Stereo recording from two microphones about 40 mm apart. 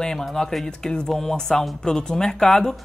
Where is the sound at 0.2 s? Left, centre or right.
Centre.